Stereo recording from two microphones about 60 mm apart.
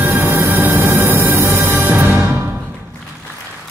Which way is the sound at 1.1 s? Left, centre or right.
Right.